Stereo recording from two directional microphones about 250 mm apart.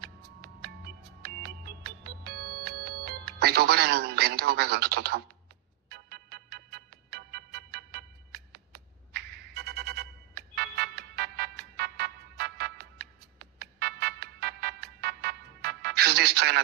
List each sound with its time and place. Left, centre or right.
0.0 s music: right